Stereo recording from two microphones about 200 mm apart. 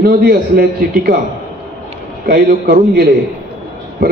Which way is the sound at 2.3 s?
50° right (ahead or behind).